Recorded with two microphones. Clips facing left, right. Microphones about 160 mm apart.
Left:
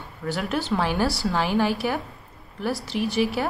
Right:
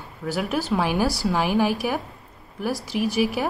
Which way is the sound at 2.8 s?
10° right (ahead or behind).